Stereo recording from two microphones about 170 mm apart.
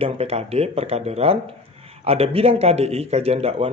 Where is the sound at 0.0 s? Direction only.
35° right (ahead or behind).